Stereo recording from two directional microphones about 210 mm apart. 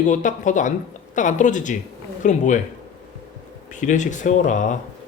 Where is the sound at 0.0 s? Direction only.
35° left (ahead or behind).